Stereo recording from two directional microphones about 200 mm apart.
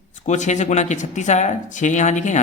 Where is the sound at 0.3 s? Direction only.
35° left (ahead or behind).